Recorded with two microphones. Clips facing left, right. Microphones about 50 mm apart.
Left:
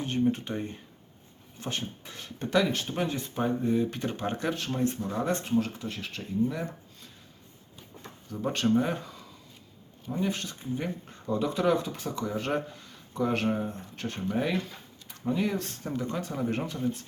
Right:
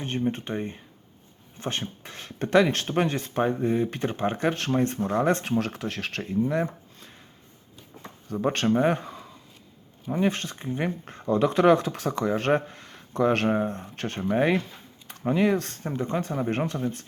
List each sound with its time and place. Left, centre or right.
0.3 s speech: right
1.5 s speech: right
3.4 s speech: right
4.5 s speech: right
5.5 s speech: right
6.5 s a sound: right
8.4 s speech: right
15.9 s speech: right